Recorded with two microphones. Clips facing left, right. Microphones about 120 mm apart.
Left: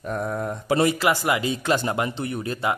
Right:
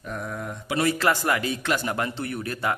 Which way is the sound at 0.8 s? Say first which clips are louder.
Even; 15° left (ahead or behind).